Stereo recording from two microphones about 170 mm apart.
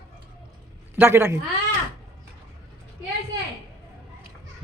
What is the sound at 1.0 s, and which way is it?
Speech, 15° right (ahead or behind).